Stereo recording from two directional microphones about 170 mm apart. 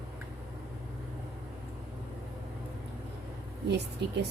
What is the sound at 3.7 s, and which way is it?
Speech, 85° right.